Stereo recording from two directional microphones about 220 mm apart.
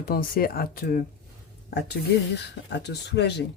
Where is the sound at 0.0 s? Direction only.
40° left (ahead or behind).